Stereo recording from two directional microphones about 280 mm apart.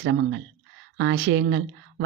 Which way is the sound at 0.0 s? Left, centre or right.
Right.